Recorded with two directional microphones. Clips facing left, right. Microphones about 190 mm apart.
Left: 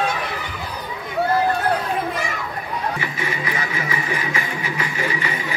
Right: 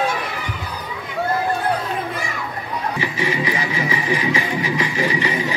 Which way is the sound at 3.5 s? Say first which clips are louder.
Right 3 dB; 15° right (ahead or behind).